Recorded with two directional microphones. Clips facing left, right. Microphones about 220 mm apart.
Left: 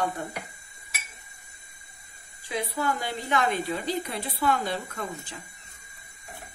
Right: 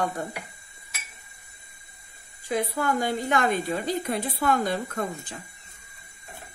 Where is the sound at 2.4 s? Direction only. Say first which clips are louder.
Right 3 dB; 50° right (ahead or behind).